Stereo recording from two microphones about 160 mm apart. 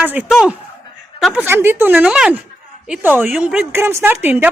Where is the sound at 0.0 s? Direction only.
10° right (ahead or behind).